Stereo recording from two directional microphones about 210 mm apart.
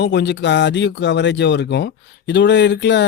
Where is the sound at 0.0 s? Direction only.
55° left (ahead or behind).